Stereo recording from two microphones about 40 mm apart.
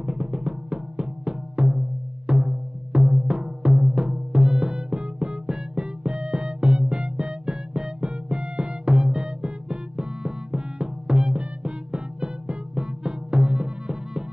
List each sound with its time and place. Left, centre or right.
0.0 s music: right